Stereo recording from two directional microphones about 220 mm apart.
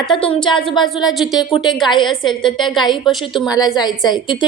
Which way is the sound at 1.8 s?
20° left (ahead or behind).